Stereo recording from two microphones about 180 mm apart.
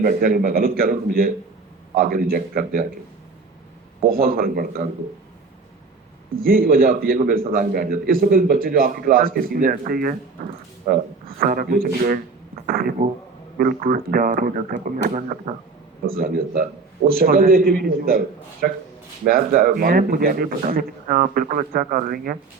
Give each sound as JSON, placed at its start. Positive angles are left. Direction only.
{"t": 0.0, "sound": "a man's voice", "side_deg": -50}
{"t": 4.2, "sound": "a man's voice", "side_deg": -55}
{"t": 6.4, "sound": "a man's voice", "side_deg": -55}